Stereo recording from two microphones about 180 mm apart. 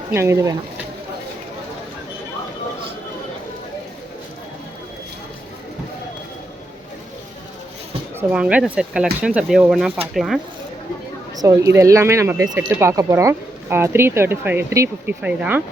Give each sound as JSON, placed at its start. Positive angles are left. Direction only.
{"t": 0.1, "sound": "speech", "side_deg": -15}
{"t": 8.3, "sound": "speech", "side_deg": -5}
{"t": 11.3, "sound": "speech", "side_deg": -15}